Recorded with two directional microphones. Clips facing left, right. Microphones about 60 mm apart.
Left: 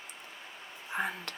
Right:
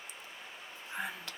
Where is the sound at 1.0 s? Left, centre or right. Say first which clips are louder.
Left 6 dB; left.